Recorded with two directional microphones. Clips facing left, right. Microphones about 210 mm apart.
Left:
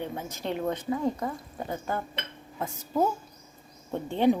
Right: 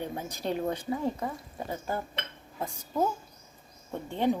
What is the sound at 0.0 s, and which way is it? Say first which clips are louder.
Speech: even; 15° right (ahead or behind).